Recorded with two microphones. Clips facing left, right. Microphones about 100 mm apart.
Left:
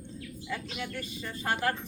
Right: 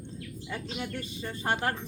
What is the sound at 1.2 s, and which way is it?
Speech, 25° right (ahead or behind).